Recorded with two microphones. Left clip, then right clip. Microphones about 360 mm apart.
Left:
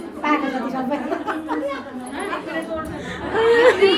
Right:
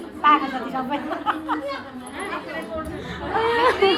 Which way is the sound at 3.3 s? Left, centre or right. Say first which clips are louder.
Left 5 dB; centre.